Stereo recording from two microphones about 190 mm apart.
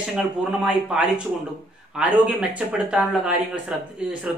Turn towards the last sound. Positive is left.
turn(degrees=-5)  # may be behind; listen again after turning